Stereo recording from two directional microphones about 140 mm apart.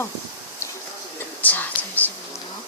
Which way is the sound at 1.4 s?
10° left (ahead or behind).